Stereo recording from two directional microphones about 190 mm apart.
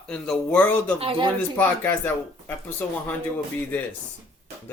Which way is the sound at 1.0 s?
30° right (ahead or behind).